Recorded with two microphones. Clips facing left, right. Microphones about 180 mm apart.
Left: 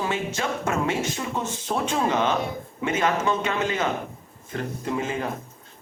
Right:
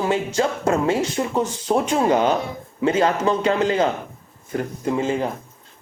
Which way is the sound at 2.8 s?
35° right (ahead or behind).